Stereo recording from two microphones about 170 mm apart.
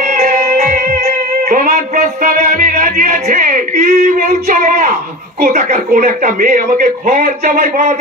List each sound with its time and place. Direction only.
0.0 s speech: 45° right (ahead or behind)